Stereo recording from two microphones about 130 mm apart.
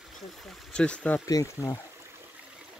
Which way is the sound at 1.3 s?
25° left (ahead or behind).